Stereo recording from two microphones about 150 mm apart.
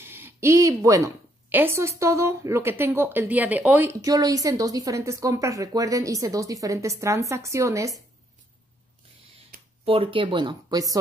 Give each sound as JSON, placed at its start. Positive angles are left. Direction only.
{"t": 0.0, "sound": "a woman's voice", "side_deg": -15}
{"t": 4.0, "sound": "a woman's voice", "side_deg": -25}
{"t": 9.8, "sound": "speech", "side_deg": -35}